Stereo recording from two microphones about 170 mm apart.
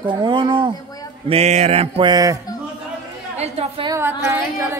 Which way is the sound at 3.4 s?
40° right (ahead or behind).